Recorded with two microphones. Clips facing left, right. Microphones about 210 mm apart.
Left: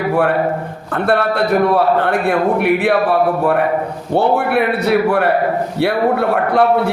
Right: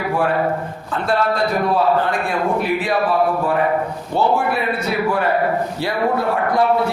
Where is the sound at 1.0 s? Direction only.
60° left (ahead or behind).